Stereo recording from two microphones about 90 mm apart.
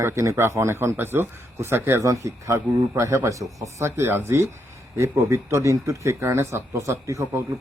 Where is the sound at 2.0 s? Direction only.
35° right (ahead or behind).